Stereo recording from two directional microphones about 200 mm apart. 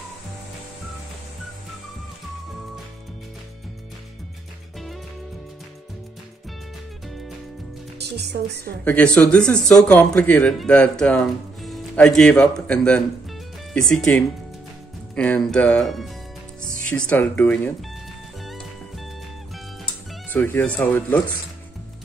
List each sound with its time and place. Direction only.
8.0 s speech: 55° right (ahead or behind)
8.8 s speech: 5° left (ahead or behind)
18.4 s music: centre (ahead or behind)